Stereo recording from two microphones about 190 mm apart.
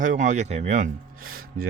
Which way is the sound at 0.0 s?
40° right (ahead or behind).